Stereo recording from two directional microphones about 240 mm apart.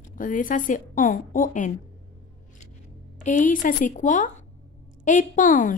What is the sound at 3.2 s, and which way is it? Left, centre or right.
A woman's voice, left.